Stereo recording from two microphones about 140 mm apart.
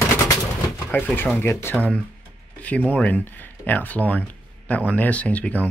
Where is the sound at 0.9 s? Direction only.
15° left (ahead or behind).